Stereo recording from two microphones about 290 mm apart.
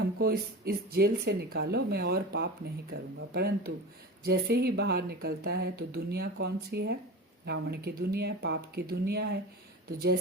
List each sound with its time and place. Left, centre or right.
0.0 s speech: right